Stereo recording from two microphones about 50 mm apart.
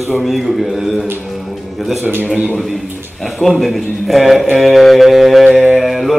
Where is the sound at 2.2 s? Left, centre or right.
Centre.